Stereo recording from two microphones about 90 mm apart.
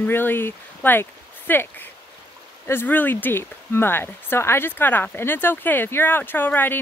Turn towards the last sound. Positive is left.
turn(degrees=20)  # may be behind; listen again after turning